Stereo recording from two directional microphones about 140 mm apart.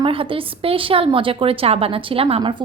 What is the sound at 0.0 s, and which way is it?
A woman's voice, 40° right (ahead or behind).